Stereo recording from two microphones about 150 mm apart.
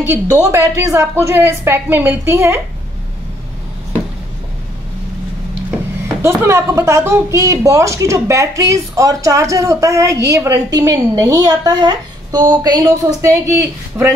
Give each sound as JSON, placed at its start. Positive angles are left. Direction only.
{"t": 0.0, "sound": "a woman's voice", "side_deg": -15}
{"t": 6.2, "sound": "a woman's voice", "side_deg": -20}